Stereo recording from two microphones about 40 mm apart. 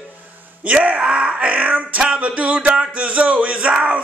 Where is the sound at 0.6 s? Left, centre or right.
Right.